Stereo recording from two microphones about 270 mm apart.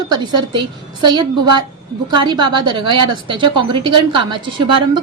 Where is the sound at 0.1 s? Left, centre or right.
Centre.